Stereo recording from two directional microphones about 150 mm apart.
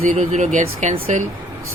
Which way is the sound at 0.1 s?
55° right (ahead or behind).